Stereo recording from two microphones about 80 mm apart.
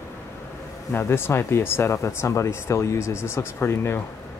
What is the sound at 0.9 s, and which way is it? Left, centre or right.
Speech, left.